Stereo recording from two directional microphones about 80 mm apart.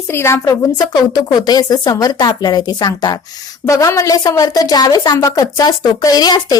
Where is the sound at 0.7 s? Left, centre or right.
Left.